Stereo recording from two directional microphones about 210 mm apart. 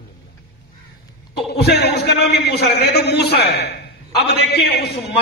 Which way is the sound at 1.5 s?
50° left (ahead or behind).